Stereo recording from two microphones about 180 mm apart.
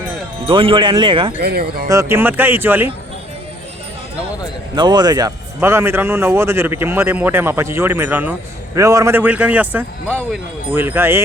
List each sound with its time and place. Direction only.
0.4 s speech: 30° right (ahead or behind)
1.4 s speech: 60° right (ahead or behind)
1.9 s a man's voice: 15° right (ahead or behind)
4.7 s a man's voice: 25° right (ahead or behind)